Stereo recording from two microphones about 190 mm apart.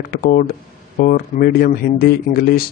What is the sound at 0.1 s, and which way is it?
Speech, 50° left (ahead or behind).